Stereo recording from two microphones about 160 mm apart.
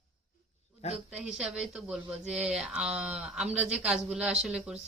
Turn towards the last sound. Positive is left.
turn(degrees=-5)  # may be behind; listen again after turning